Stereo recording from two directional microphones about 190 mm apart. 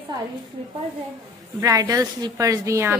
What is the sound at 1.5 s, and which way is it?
Speech, 20° right (ahead or behind).